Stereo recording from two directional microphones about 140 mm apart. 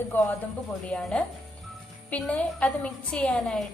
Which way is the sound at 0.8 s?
10° left (ahead or behind).